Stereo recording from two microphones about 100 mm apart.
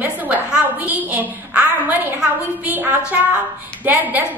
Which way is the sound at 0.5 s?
15° right (ahead or behind).